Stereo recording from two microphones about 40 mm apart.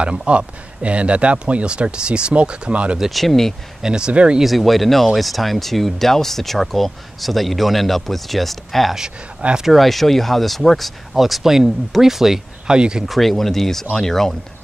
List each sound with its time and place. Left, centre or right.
0.0 s speech: right
3.1 s speech: centre
3.8 s speech: centre
4.1 s speech: right
4.4 s speech: centre
12.6 s speech: right
13.0 s speech: centre